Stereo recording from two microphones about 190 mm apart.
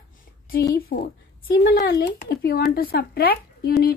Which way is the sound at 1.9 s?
65° left (ahead or behind).